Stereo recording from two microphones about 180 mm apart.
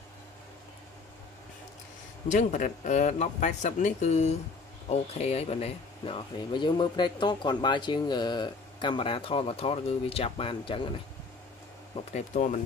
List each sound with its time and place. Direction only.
2.2 s speech: 40° left (ahead or behind)
11.9 s speech: 40° left (ahead or behind)